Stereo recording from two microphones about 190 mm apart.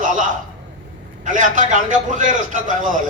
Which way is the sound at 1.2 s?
40° right (ahead or behind).